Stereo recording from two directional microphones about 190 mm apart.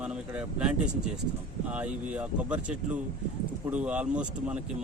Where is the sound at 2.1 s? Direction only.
5° right (ahead or behind).